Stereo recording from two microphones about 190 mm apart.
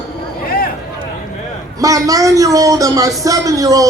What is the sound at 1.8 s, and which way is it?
A man's voice, 15° right (ahead or behind).